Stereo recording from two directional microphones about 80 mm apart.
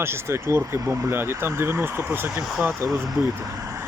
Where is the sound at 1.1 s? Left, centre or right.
Right.